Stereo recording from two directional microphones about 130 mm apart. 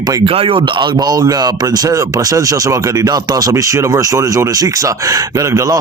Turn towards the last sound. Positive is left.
turn(degrees=-25)  # may be behind; listen again after turning